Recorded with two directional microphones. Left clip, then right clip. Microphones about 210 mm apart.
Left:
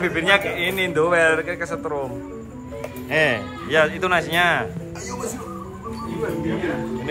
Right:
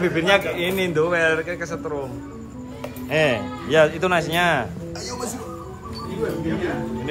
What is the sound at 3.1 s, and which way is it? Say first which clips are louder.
Speech: even; 20° right (ahead or behind).